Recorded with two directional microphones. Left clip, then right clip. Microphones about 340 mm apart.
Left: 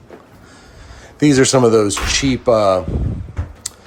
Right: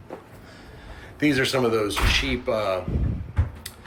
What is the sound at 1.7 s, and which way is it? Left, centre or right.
Speech, centre.